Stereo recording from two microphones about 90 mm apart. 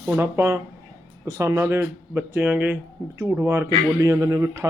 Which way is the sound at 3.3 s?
30° right (ahead or behind).